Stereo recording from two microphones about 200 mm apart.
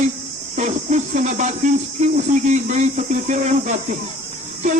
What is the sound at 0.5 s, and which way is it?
Speech, 35° right (ahead or behind).